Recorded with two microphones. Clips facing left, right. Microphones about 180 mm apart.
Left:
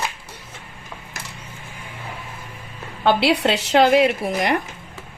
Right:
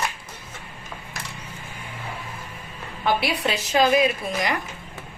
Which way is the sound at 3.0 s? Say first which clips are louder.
Left 6 dB; 70° left (ahead or behind).